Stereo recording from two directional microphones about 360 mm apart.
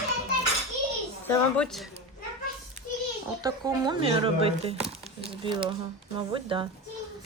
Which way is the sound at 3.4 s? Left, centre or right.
Centre.